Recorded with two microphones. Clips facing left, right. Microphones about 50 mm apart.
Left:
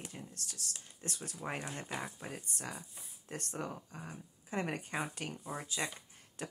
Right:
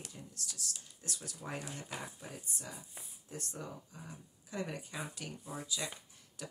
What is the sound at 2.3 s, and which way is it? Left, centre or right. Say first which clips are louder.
Speech: left 3 dB; left.